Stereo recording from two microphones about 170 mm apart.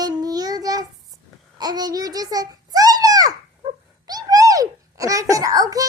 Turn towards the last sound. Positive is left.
turn(degrees=-20)  # may be behind; listen again after turning